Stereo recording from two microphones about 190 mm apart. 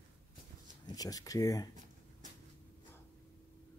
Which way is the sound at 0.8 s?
20° left (ahead or behind).